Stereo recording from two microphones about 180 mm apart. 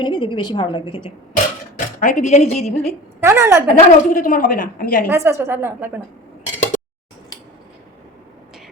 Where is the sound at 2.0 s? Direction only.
45° left (ahead or behind).